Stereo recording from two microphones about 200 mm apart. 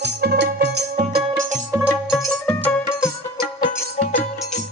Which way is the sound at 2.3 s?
10° left (ahead or behind).